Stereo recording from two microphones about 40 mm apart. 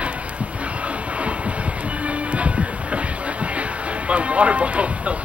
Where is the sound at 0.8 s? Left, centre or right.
Right.